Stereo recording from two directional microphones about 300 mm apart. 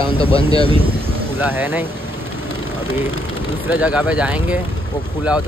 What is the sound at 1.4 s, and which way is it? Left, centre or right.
Speech, centre.